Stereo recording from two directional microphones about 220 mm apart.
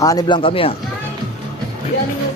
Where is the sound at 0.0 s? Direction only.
20° left (ahead or behind).